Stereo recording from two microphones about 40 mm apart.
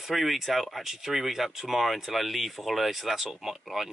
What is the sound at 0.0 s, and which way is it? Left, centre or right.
Speech, centre.